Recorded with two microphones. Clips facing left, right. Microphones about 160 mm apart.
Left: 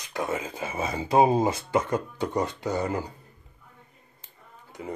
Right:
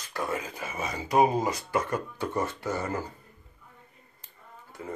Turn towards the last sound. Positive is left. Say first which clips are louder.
# left 2 dB
turn(degrees=20)  # may be behind; listen again after turning